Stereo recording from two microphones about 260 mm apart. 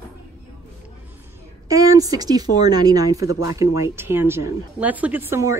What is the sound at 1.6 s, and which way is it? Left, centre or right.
A woman's voice, centre.